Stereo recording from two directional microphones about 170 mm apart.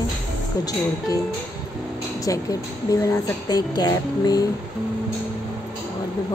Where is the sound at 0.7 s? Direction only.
20° left (ahead or behind).